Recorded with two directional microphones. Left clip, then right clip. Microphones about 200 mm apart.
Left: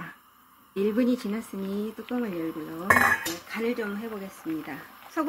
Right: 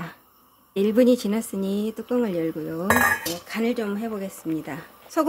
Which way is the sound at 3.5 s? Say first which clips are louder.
Right 4 dB; 55° right (ahead or behind).